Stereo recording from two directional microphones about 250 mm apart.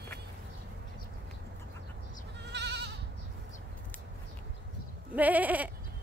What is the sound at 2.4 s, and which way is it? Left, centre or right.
Goat, right.